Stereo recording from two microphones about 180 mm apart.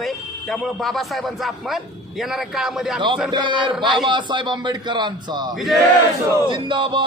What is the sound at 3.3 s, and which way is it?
Speech, 25° right (ahead or behind).